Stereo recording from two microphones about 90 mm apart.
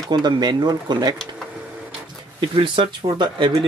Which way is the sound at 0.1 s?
50° right (ahead or behind).